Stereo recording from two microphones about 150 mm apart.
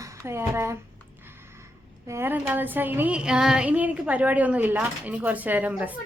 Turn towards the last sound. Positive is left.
turn(degrees=-10)  # may be behind; listen again after turning